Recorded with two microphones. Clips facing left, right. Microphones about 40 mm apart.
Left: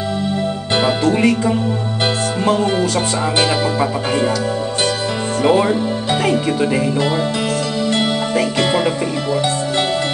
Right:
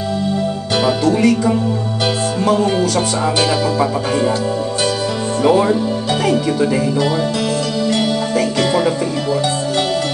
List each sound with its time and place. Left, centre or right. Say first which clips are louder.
0.8 s speech: right 1 dB; left
5.4 s speech: right 1 dB; left
7.9 s music: even; left